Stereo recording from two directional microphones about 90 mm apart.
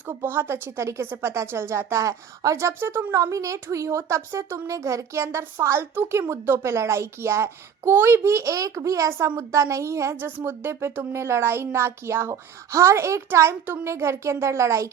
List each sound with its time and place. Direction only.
0.1 s speech: 25° right (ahead or behind)